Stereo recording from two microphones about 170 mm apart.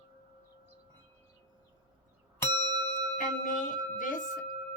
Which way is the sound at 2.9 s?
50° left (ahead or behind).